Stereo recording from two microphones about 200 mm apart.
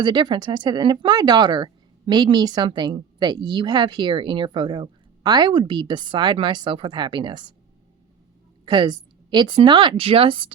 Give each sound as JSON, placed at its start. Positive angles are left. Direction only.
{"t": 0.0, "sound": "speech", "side_deg": -25}
{"t": 8.6, "sound": "speech", "side_deg": -20}